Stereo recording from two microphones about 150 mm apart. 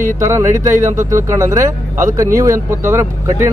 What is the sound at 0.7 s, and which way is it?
Speech, 60° right (ahead or behind).